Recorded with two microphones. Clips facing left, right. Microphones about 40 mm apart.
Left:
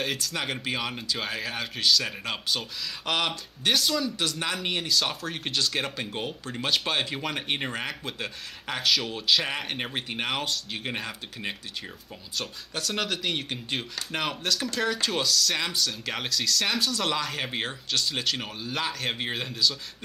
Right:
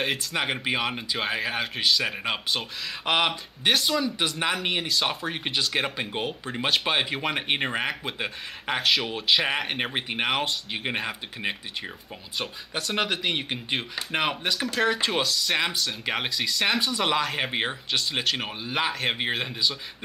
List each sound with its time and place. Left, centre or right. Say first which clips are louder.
0.0 s speech: right 3 dB; centre